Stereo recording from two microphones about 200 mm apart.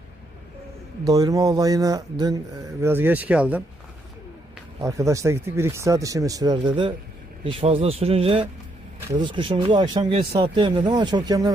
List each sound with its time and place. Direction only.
1.0 s speech: 20° right (ahead or behind)
4.8 s speech: 15° right (ahead or behind)